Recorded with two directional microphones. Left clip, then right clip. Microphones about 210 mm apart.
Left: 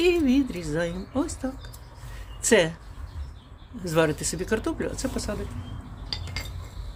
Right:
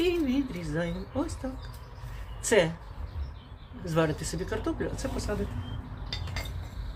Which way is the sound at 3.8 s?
50° left (ahead or behind).